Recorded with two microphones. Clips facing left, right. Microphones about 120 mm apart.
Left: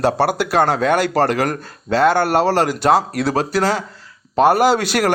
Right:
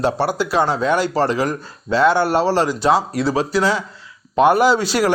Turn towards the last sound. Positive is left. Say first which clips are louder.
# even
turn(degrees=60)  # may be behind; listen again after turning